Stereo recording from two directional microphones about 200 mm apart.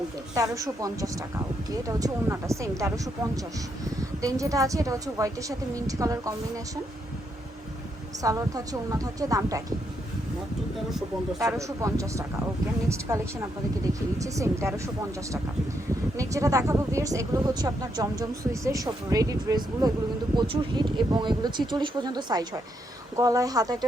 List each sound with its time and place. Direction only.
0.3 s speech: 15° right (ahead or behind)
8.2 s speech: 15° right (ahead or behind)
11.5 s speech: 15° right (ahead or behind)
16.1 s speech: 15° right (ahead or behind)